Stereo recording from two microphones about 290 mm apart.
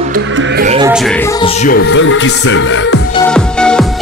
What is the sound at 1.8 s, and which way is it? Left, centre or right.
Speech, left.